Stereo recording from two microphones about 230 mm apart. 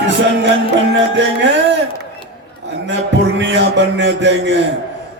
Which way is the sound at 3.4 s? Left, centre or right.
Right.